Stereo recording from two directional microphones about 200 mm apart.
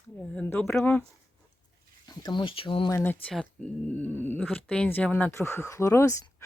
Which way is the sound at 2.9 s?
10° left (ahead or behind).